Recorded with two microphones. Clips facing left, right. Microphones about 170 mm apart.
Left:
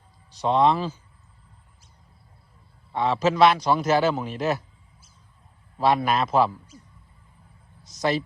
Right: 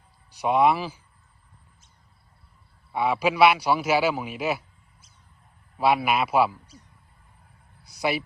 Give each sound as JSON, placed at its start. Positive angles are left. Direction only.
{"t": 0.3, "sound": "speech", "side_deg": -10}
{"t": 2.9, "sound": "a man's voice", "side_deg": -10}
{"t": 5.7, "sound": "a man's voice", "side_deg": -10}
{"t": 7.9, "sound": "a sound", "side_deg": -10}